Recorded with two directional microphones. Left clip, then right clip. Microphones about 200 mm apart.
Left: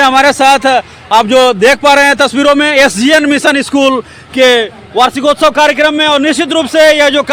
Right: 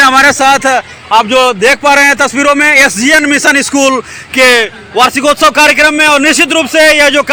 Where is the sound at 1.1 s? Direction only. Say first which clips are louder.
Even; 40° left (ahead or behind); by 5.1 s 10° left (ahead or behind).